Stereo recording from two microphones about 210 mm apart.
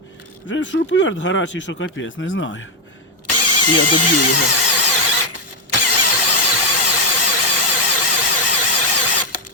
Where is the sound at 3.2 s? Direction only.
90° left.